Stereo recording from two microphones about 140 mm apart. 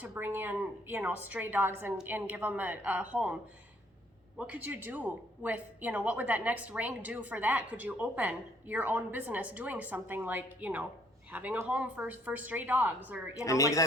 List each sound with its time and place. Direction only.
0.0 s a woman's voice: 15° right (ahead or behind)
4.4 s a woman's voice: 10° right (ahead or behind)
13.3 s speech: 20° left (ahead or behind)